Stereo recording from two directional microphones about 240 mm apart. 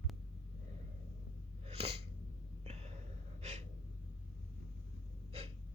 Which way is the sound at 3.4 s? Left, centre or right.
Right.